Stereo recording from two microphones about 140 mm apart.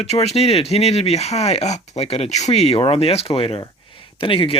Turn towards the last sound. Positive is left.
turn(degrees=40)  # may be behind; listen again after turning